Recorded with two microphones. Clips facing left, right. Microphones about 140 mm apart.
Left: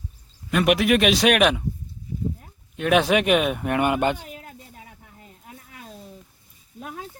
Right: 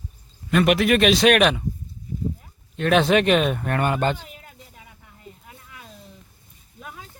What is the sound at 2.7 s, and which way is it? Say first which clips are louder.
Speech: right 1 dB; 10° left (ahead or behind).